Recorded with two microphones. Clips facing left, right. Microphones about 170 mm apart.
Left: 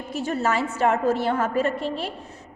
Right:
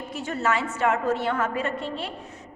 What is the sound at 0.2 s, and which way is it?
A woman's voice, 35° left (ahead or behind).